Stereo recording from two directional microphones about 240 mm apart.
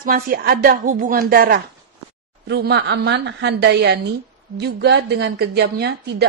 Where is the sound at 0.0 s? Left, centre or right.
Right.